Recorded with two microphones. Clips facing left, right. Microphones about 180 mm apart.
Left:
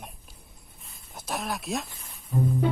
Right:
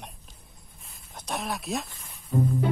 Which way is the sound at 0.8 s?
Centre (ahead or behind).